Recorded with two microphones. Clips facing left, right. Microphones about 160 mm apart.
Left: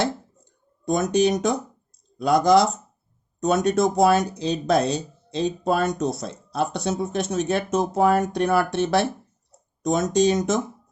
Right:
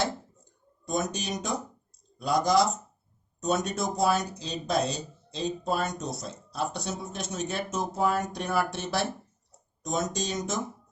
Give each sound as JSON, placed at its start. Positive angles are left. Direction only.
{"t": 0.9, "sound": "speech", "side_deg": 65}